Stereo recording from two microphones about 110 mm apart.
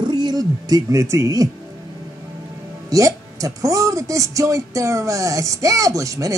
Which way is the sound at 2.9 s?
30° right (ahead or behind).